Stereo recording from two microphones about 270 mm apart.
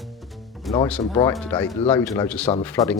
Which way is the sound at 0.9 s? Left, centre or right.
Centre.